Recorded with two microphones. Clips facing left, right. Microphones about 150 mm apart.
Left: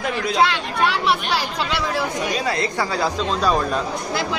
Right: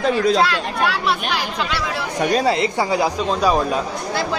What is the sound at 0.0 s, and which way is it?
Speech, 35° right (ahead or behind).